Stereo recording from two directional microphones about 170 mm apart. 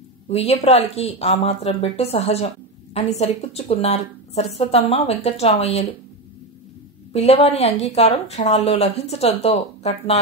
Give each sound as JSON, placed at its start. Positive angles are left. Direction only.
{"t": 0.3, "sound": "speech", "side_deg": 40}
{"t": 7.1, "sound": "speech", "side_deg": 35}